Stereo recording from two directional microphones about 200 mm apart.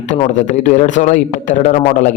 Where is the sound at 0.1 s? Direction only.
35° left (ahead or behind).